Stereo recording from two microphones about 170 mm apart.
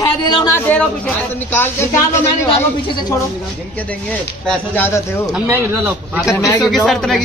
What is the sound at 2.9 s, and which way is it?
Speech, 25° left (ahead or behind).